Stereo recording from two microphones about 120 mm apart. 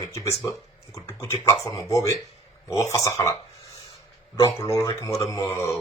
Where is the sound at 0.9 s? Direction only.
25° left (ahead or behind).